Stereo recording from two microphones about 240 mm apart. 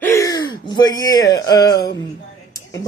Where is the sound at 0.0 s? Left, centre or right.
Centre.